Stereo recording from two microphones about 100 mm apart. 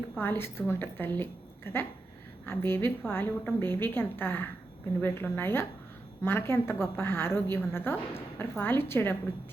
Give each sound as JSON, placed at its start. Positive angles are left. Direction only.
{"t": 0.2, "sound": "a woman's voice", "side_deg": 20}